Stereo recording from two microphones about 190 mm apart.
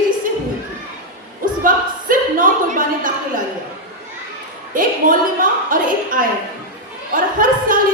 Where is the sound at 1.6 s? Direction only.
45° right (ahead or behind).